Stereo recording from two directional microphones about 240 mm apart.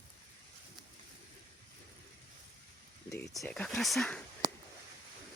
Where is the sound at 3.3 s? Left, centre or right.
Centre.